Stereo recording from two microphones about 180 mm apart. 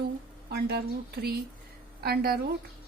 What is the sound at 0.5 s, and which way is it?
A woman's voice, 65° right (ahead or behind).